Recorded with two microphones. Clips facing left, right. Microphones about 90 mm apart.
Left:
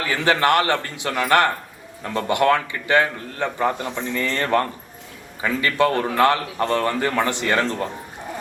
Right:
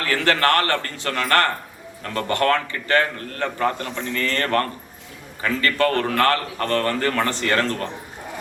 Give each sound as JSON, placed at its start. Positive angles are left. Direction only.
{"t": 0.0, "sound": "a man's voice", "side_deg": 15}